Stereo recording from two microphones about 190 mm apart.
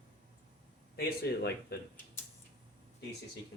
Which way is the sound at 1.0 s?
55° left (ahead or behind).